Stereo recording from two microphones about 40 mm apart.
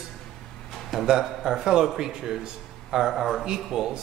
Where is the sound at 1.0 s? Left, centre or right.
Centre.